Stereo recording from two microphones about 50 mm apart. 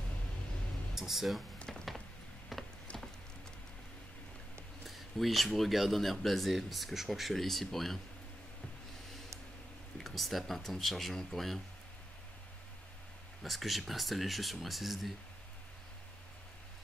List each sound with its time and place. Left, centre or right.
0.9 s speech: centre
1.7 s a sound: centre
2.9 s a sound: left
4.8 s speech: centre
9.9 s speech: centre
13.4 s speech: centre